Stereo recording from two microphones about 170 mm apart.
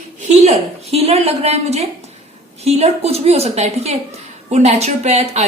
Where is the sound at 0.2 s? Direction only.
40° right (ahead or behind).